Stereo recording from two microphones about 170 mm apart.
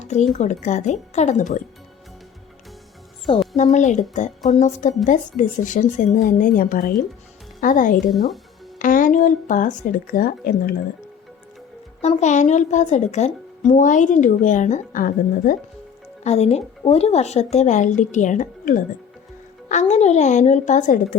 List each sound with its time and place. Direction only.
0.0 s speech: 40° left (ahead or behind)
3.3 s music: centre (ahead or behind)
3.6 s speech: 45° left (ahead or behind)
12.0 s speech: 45° left (ahead or behind)
16.2 s a woman's voice: 40° left (ahead or behind)